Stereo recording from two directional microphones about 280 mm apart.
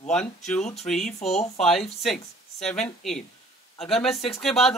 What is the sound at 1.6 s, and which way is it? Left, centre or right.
Speech, centre.